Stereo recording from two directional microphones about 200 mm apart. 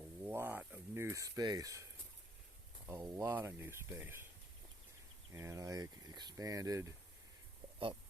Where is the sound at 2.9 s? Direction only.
15° right (ahead or behind).